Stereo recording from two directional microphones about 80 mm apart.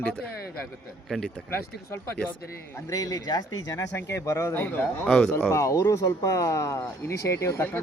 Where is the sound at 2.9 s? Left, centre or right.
Left.